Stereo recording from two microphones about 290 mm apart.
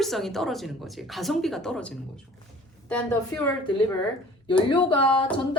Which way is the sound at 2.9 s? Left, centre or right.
Centre.